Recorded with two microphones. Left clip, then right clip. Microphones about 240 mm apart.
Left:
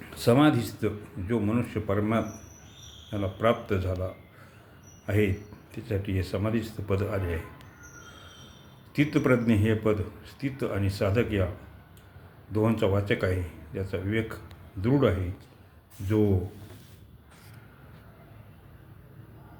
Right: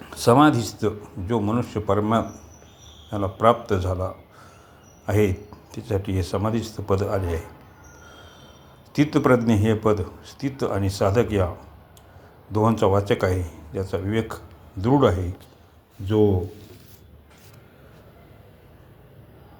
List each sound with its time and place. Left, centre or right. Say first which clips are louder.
0.1 s a man's voice: right 6 dB; centre
8.9 s a man's voice: right 6 dB; centre
12.5 s a man's voice: right 6 dB; centre